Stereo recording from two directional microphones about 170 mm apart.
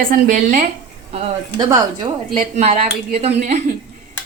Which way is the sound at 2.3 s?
40° right (ahead or behind).